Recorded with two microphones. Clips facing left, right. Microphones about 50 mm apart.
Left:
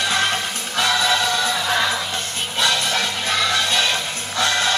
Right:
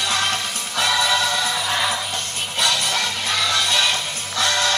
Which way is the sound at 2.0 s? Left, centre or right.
Left.